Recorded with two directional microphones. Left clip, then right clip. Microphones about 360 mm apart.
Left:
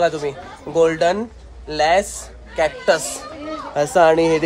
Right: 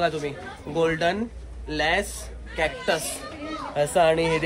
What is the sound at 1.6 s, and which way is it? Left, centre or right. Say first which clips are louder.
Speech: left 8 dB; left.